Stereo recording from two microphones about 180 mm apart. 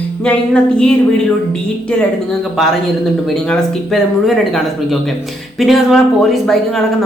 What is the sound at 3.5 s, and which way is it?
Speech, centre (ahead or behind).